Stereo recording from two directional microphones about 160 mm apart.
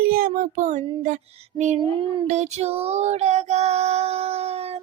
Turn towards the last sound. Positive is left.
turn(degrees=-40)  # may be behind; listen again after turning